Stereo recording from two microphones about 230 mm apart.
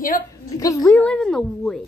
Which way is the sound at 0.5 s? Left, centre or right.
Centre.